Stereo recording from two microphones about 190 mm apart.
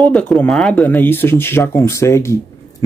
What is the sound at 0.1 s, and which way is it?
Speech, 5° left (ahead or behind).